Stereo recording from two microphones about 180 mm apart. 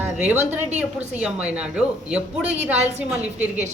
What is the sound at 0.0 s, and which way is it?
A woman's voice, 10° right (ahead or behind).